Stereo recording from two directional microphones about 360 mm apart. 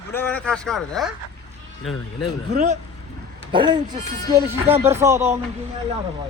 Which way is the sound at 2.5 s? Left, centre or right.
Centre.